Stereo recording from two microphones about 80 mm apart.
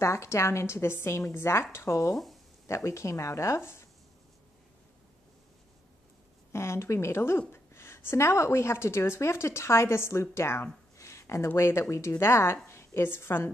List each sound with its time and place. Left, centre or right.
0.0 s a woman's voice: left
6.5 s a woman's voice: left